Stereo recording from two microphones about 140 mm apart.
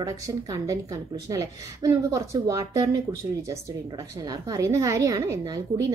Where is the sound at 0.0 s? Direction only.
25° right (ahead or behind).